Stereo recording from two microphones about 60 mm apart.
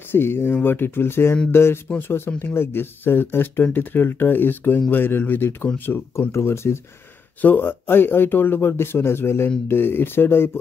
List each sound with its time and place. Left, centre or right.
0.1 s speech: left
6.1 s speech: left
7.4 s speech: left